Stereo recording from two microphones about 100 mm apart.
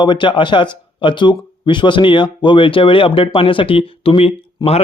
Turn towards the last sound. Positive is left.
turn(degrees=80)